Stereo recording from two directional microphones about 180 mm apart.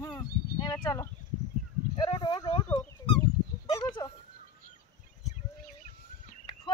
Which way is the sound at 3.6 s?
25° left (ahead or behind).